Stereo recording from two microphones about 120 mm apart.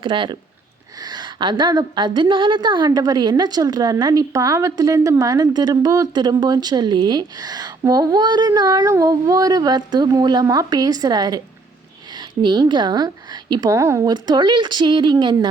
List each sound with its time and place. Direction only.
0.0 s a woman's voice: 40° right (ahead or behind)
13.7 s speech: 25° right (ahead or behind)
14.0 s a woman's voice: 40° right (ahead or behind)